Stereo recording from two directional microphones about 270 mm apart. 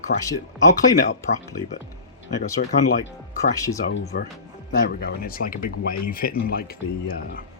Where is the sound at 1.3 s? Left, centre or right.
Left.